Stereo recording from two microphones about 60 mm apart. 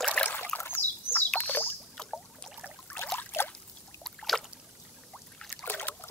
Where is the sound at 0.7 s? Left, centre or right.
Left.